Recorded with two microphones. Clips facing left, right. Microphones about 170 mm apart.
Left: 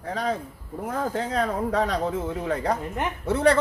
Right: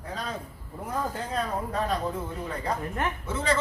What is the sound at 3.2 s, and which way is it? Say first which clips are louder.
Speech: left 10 dB; 65° left (ahead or behind).